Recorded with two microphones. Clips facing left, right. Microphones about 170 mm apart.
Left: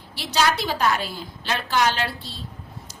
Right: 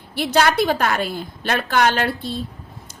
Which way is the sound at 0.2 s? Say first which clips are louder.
Right 5 dB; 55° right (ahead or behind).